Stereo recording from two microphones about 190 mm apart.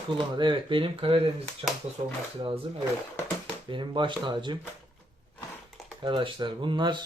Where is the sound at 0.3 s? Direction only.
25° right (ahead or behind).